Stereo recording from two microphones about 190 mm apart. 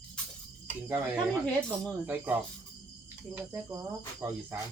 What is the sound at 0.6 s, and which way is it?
Speech, 10° right (ahead or behind).